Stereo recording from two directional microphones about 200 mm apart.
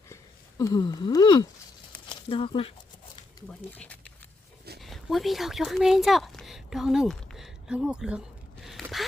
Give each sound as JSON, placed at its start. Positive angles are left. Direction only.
{"t": 0.6, "sound": "speech", "side_deg": 20}
{"t": 3.8, "sound": "a sound", "side_deg": 5}
{"t": 4.8, "sound": "speech", "side_deg": 0}
{"t": 8.6, "sound": "gasp", "side_deg": 0}